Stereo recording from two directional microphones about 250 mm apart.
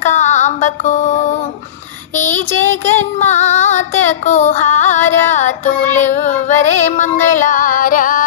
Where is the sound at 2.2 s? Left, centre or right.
Left.